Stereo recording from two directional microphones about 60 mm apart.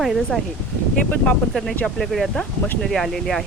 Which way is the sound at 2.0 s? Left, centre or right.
Centre.